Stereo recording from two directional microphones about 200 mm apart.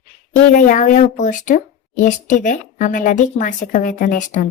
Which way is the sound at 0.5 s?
40° left (ahead or behind).